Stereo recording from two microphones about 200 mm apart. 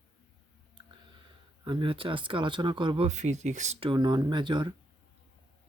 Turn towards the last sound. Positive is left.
turn(degrees=-25)  # may be behind; listen again after turning